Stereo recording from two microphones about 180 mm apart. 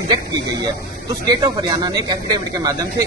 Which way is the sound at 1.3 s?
25° right (ahead or behind).